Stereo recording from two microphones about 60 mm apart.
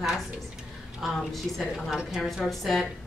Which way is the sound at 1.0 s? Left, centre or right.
Centre.